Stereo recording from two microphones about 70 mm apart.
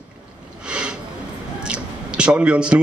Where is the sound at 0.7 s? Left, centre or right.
Centre.